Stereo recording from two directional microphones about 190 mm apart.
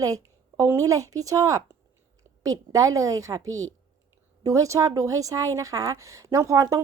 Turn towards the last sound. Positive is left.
turn(degrees=-15)  # may be behind; listen again after turning